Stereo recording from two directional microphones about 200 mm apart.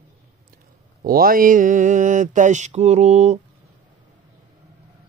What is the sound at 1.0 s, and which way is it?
Mantra, 45° right (ahead or behind).